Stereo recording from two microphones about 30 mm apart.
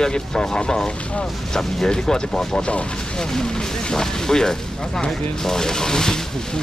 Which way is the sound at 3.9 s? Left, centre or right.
Left.